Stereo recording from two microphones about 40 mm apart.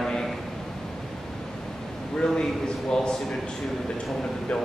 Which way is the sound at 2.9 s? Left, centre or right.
Centre.